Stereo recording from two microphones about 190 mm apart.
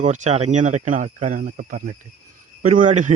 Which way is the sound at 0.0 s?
40° right (ahead or behind).